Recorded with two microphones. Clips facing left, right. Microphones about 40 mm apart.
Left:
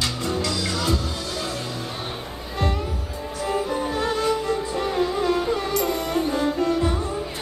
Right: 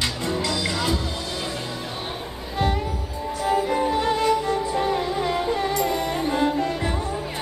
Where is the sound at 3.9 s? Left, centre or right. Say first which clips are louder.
Even; right.